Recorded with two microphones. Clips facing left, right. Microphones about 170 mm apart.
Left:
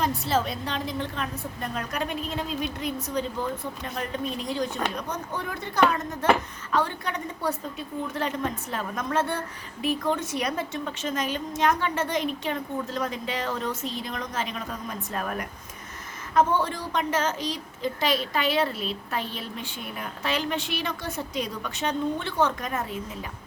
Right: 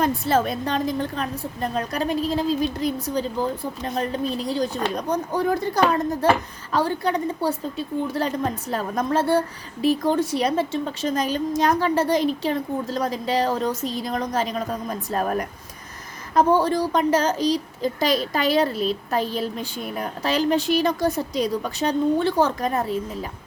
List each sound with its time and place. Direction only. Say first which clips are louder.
0.0 s a woman's voice: right 5 dB; 55° right (ahead or behind); by 23.0 s 35° right (ahead or behind)